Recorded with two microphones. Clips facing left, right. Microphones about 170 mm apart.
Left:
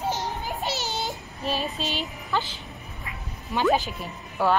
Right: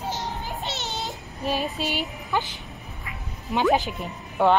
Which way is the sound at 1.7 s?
15° right (ahead or behind).